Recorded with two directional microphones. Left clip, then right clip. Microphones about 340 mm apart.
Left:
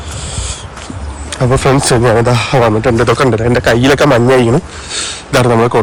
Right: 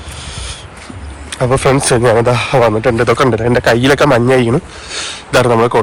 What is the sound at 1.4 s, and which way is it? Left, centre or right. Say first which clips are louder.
Speech: left 1 dB; centre.